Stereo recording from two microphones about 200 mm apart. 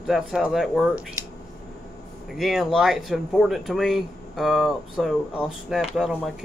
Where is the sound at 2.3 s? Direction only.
Centre (ahead or behind).